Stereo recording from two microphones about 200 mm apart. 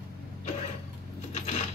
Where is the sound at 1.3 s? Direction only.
35° left (ahead or behind).